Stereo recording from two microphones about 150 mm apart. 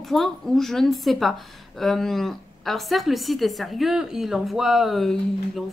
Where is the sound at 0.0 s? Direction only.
Centre (ahead or behind).